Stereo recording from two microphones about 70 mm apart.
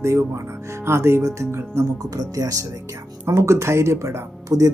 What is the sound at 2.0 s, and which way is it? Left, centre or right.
Speech, right.